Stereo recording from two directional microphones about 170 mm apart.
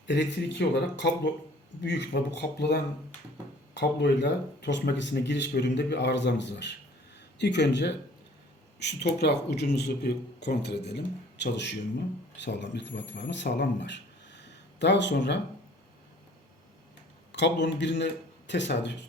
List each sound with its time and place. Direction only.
0.1 s speech: 85° left
3.8 s speech: 90° left
17.3 s speech: 90° left